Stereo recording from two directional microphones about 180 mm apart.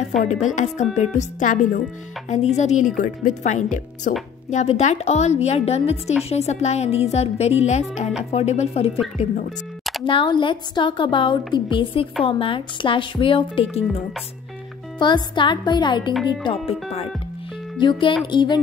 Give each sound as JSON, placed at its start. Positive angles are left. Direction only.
{"t": 0.3, "sound": "a woman's voice", "side_deg": 40}
{"t": 10.0, "sound": "a woman's voice", "side_deg": 30}
{"t": 15.0, "sound": "a woman's voice", "side_deg": 25}
{"t": 17.7, "sound": "a woman's voice", "side_deg": 25}